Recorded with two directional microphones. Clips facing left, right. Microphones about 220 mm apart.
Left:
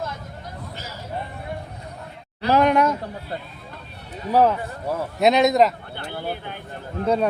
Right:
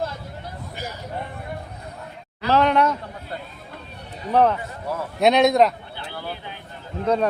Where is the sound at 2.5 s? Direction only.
10° left (ahead or behind).